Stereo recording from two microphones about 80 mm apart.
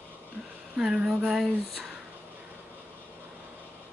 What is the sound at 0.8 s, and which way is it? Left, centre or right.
A woman's voice, centre.